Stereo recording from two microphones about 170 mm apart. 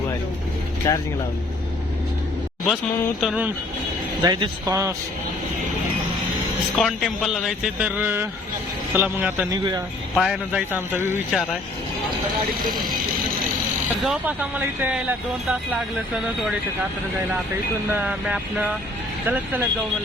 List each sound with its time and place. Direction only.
0.8 s speech: 20° left (ahead or behind)
2.6 s speech: centre (ahead or behind)
4.2 s speech: 20° right (ahead or behind)
6.7 s speech: centre (ahead or behind)
9.5 s speech: 25° right (ahead or behind)
10.2 s speech: centre (ahead or behind)
10.7 s speech: 10° right (ahead or behind)
14.0 s speech: 5° right (ahead or behind)
17.9 s speech: 5° right (ahead or behind)